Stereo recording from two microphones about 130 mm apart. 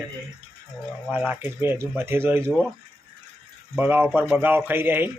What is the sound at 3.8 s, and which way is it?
Speech, 15° right (ahead or behind).